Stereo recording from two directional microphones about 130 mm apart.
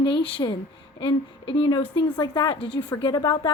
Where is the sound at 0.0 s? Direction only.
40° left (ahead or behind).